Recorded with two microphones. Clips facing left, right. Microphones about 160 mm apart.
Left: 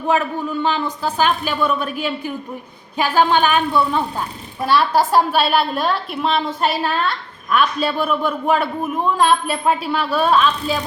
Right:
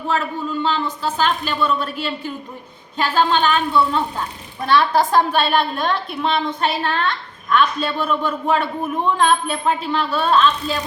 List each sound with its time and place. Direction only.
0.6 s a man's voice: 15° left (ahead or behind)